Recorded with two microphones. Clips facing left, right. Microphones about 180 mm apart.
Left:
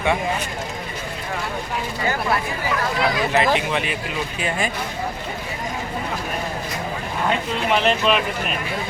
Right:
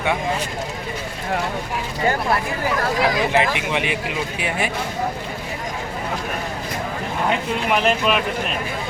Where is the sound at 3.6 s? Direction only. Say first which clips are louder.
Even; 15° right (ahead or behind).